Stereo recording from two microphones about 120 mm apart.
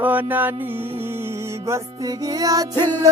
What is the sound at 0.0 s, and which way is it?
Music, 15° right (ahead or behind).